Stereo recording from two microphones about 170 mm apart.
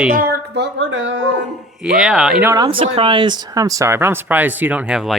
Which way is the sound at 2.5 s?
25° right (ahead or behind).